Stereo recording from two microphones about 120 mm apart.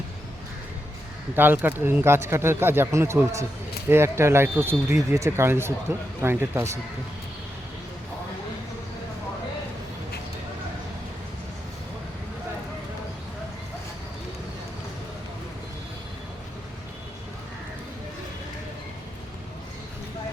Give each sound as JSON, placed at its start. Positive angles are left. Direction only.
{"t": 1.4, "sound": "speech", "side_deg": -15}